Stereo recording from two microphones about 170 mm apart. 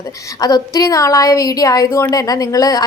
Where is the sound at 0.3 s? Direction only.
20° left (ahead or behind).